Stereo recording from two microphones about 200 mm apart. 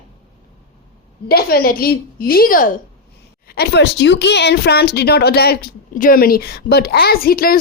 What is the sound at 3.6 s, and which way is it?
Speech, 60° left (ahead or behind).